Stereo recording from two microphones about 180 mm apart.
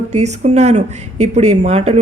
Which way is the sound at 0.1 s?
40° right (ahead or behind).